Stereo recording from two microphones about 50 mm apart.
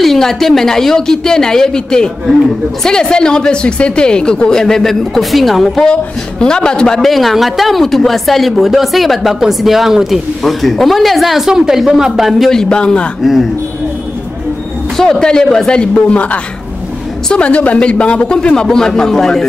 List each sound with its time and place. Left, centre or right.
0.0 s a woman's voice: centre
6.4 s a woman's voice: centre
7.0 s speech: centre
12.4 s a woman's voice: centre
13.2 s speech: centre
15.0 s a woman's voice: centre